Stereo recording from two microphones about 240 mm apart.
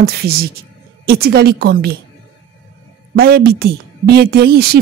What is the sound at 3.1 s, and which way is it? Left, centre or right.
A woman's voice, right.